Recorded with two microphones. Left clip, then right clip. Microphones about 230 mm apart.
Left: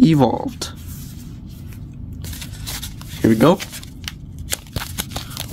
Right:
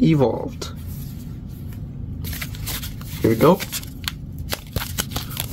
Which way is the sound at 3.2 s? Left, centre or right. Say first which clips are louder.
Left 1 dB; left.